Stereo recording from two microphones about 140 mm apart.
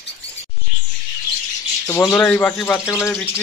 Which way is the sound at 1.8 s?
20° left (ahead or behind).